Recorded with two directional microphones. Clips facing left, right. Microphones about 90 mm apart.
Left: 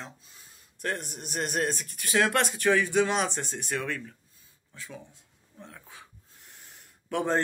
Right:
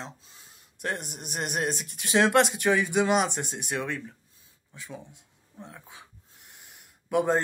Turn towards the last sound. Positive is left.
turn(degrees=-15)  # may be behind; listen again after turning